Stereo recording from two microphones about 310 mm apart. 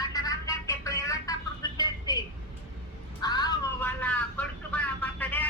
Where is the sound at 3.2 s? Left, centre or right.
Centre.